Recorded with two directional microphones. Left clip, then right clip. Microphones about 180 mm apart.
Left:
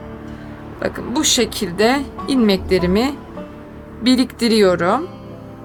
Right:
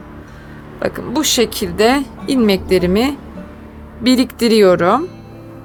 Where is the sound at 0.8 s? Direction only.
20° right (ahead or behind).